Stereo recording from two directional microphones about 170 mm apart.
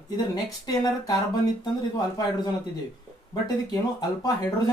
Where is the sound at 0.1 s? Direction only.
25° left (ahead or behind).